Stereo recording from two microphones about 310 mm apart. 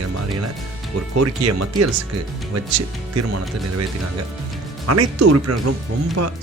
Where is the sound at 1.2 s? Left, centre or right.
Right.